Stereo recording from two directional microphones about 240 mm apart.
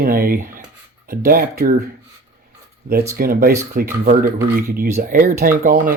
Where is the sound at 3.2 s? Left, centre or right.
Right.